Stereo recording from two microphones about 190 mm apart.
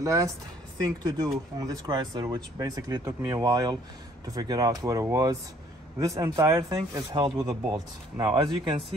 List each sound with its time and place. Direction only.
0.0 s a woman's voice: 15° right (ahead or behind)